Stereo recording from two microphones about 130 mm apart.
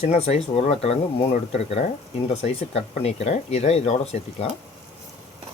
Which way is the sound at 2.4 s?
55° left (ahead or behind).